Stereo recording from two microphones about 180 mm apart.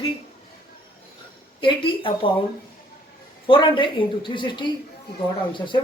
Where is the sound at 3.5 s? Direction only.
25° left (ahead or behind).